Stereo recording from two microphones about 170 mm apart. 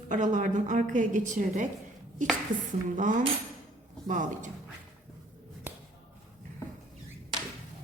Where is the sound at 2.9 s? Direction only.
50° right (ahead or behind).